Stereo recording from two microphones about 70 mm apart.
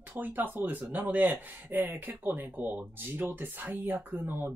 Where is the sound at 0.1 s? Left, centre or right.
Right.